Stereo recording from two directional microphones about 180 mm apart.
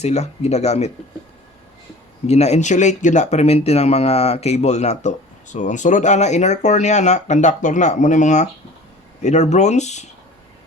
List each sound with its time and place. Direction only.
0.0 s speech: 40° left (ahead or behind)
2.2 s speech: 35° left (ahead or behind)